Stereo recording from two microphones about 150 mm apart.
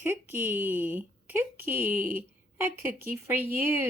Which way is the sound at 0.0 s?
15° right (ahead or behind).